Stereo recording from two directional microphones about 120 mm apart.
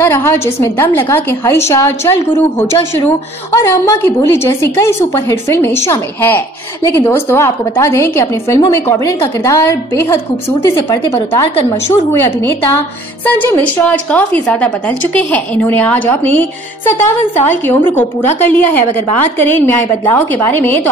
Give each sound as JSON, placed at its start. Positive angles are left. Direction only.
{"t": 0.0, "sound": "a woman's voice", "side_deg": 20}